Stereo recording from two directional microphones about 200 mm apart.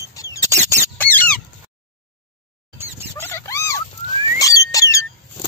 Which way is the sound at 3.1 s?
15° left (ahead or behind).